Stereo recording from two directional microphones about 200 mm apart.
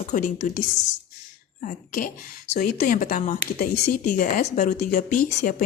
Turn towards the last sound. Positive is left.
turn(degrees=40)  # may be behind; listen again after turning